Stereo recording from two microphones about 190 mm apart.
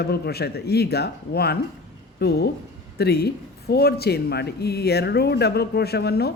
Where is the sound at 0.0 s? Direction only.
55° left (ahead or behind).